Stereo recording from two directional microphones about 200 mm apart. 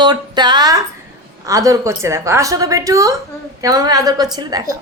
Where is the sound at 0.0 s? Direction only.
20° right (ahead or behind).